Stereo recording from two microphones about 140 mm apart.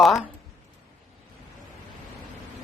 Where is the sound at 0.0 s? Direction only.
Centre (ahead or behind).